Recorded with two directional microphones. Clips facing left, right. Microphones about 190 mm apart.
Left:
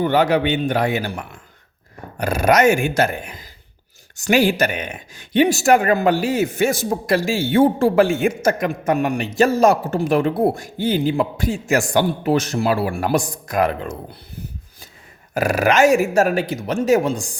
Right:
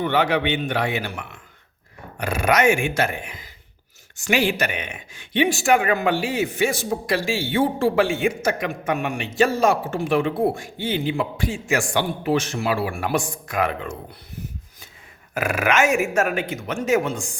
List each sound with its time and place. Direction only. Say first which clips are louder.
0.0 s speech: left 4 dB; 40° left (ahead or behind)